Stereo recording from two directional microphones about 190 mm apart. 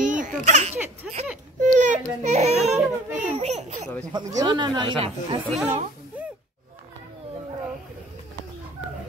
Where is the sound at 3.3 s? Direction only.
35° right (ahead or behind).